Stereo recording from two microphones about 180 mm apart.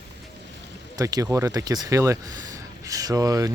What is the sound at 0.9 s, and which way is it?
Speech, 20° right (ahead or behind).